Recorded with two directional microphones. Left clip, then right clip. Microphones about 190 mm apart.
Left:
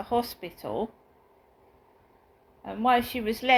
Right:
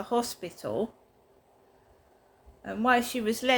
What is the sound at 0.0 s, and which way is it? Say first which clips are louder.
Speech: left 1 dB; 45° right (ahead or behind).